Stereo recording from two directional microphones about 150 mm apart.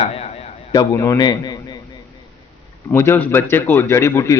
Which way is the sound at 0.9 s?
25° left (ahead or behind).